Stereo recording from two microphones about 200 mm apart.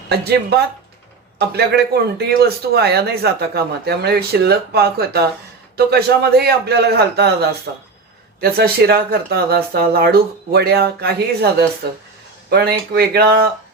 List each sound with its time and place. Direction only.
0.1 s speech: 55° right (ahead or behind)
8.4 s speech: 50° right (ahead or behind)